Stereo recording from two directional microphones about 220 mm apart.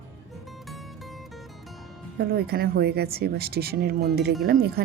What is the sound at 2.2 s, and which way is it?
Speech, 45° right (ahead or behind).